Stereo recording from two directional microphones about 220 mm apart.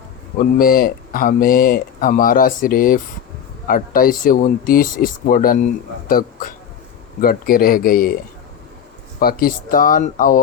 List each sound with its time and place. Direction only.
0.3 s speech: 40° left (ahead or behind)
9.2 s speech: 40° left (ahead or behind)